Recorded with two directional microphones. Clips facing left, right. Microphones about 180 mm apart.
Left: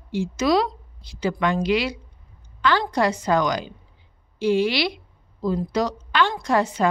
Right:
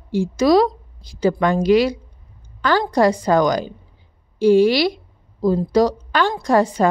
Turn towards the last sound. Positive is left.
turn(degrees=-40)  # may be behind; listen again after turning